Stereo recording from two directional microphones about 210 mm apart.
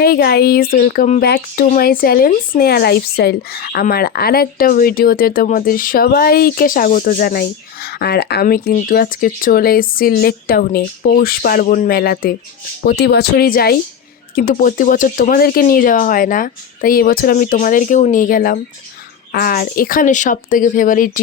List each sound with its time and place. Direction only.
0.0 s speech: 45° left (ahead or behind)